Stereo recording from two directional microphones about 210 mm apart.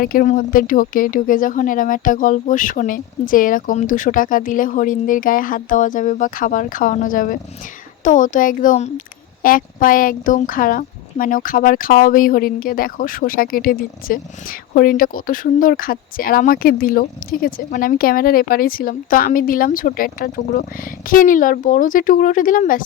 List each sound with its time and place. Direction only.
0.0 s speech: 45° left (ahead or behind)